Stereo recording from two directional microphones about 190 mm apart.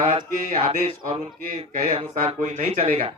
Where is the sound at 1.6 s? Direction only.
30° right (ahead or behind).